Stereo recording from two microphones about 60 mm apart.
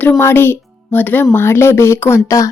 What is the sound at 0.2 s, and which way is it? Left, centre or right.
Speech, left.